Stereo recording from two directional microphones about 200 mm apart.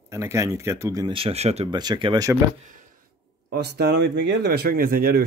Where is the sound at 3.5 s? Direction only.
55° right (ahead or behind).